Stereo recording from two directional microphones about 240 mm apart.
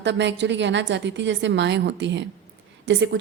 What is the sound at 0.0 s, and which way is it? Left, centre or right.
A woman's voice, right.